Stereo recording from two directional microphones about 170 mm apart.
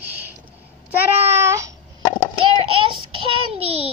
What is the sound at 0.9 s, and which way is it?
Babbling, 10° right (ahead or behind).